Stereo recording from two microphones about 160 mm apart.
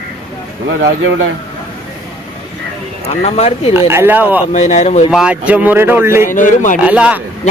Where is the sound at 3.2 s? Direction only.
40° left (ahead or behind).